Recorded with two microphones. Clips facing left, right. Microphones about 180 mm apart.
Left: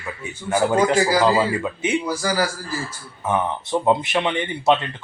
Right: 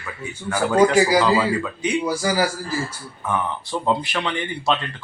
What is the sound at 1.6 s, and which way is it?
Speech, 25° left (ahead or behind).